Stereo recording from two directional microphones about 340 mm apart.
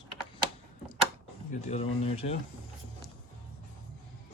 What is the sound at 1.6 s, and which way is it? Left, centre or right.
Speech, centre.